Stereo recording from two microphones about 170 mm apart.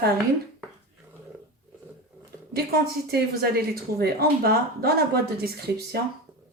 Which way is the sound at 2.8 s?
65° right (ahead or behind).